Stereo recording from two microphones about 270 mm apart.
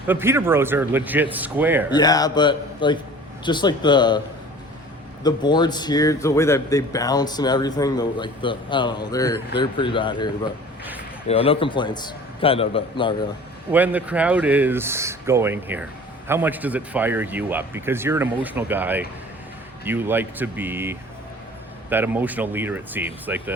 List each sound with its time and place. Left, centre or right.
0.1 s speech: centre
1.9 s a man's voice: centre
5.2 s a man's voice: centre
13.7 s speech: centre